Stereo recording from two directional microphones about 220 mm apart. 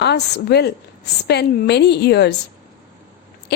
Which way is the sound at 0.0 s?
50° left (ahead or behind).